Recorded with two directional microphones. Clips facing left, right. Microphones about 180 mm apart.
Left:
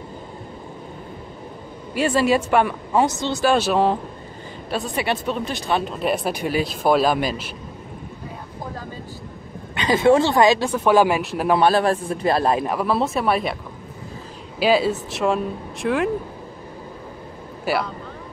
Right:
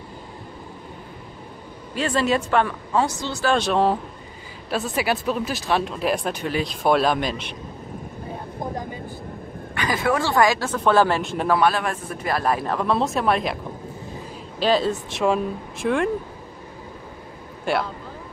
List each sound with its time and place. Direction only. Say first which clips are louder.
2.0 s speech: left 3 dB; 10° left (ahead or behind)
3.4 s speech: left 1 dB; 5° left (ahead or behind)
9.8 s a man's voice: left 7 dB; 25° left (ahead or behind); by 11.4 s 5° left (ahead or behind)
11.4 s a man's voice: left 4 dB; 25° left (ahead or behind)
12.6 s speech: left 1 dB; 5° left (ahead or behind)
14.6 s speech: left 2 dB; 10° left (ahead or behind)
17.7 s speech: left 1 dB; 5° left (ahead or behind)